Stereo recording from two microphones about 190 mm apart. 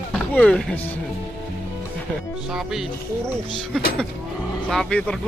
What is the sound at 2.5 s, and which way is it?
Speech, centre (ahead or behind).